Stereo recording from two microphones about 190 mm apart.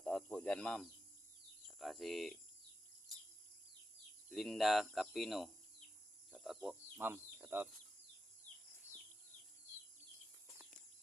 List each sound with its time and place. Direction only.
0.0 s cricket: 5° left (ahead or behind)
1.6 s speech: centre (ahead or behind)
3.1 s a sound: centre (ahead or behind)
4.3 s speech: centre (ahead or behind)